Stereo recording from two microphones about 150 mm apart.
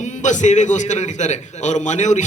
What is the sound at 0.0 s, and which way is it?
A man's voice, 55° left (ahead or behind).